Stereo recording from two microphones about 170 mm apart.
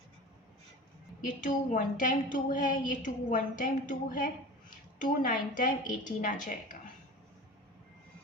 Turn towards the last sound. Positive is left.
turn(degrees=50)  # may be behind; listen again after turning